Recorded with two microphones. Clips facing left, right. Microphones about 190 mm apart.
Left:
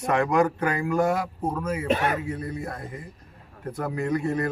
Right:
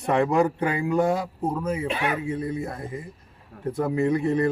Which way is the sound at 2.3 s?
25° right (ahead or behind).